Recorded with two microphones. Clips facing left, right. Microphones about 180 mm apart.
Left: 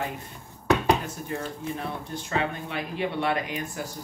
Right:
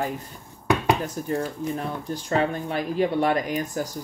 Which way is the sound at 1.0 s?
40° right (ahead or behind).